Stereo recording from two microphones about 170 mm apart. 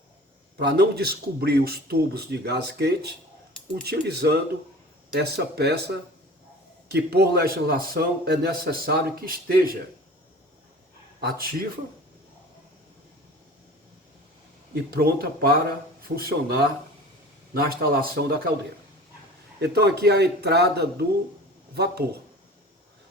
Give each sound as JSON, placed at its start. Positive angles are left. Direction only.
{"t": 0.5, "sound": "a man's voice", "side_deg": -70}
{"t": 11.2, "sound": "a man's voice", "side_deg": -65}
{"t": 14.8, "sound": "a man's voice", "side_deg": -60}
{"t": 19.5, "sound": "a man's voice", "side_deg": -70}